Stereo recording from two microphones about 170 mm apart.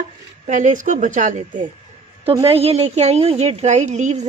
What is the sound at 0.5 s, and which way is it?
Speech, 50° right (ahead or behind).